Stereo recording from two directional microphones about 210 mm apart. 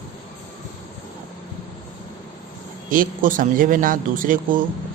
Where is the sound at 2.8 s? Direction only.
40° right (ahead or behind).